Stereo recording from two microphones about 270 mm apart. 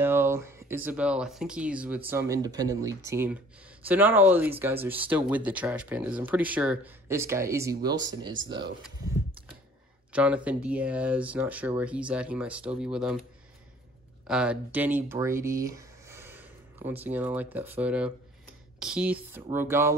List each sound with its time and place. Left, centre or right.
0.0 s speech: centre
8.3 s speech: right
10.1 s speech: centre
14.2 s speech: centre